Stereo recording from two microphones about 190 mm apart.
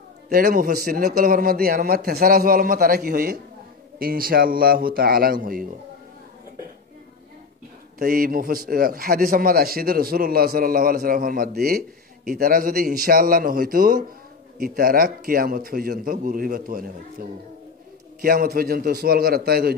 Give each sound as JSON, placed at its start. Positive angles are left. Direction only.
{"t": 0.3, "sound": "a man's voice", "side_deg": -50}
{"t": 8.0, "sound": "a man's voice", "side_deg": -50}